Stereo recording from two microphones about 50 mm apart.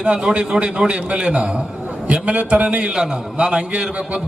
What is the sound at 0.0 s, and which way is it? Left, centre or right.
A man's voice, centre.